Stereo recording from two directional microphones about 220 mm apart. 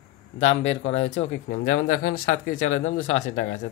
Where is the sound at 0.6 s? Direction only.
60° left (ahead or behind).